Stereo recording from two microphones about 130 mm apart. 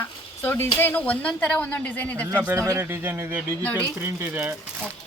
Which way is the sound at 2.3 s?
15° right (ahead or behind).